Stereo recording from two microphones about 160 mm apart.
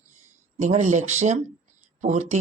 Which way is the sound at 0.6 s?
45° right (ahead or behind).